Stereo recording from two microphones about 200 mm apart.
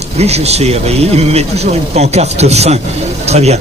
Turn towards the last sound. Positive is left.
turn(degrees=-30)  # may be behind; listen again after turning